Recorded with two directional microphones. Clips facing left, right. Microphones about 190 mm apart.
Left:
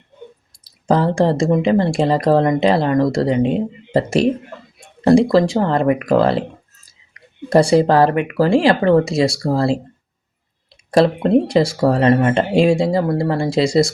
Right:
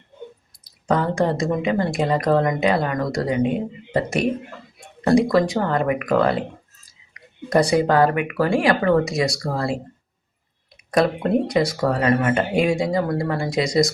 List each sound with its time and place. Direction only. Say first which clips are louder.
0.6 s speech: left 5 dB; 30° left (ahead or behind)
10.9 s speech: left 5 dB; 25° left (ahead or behind)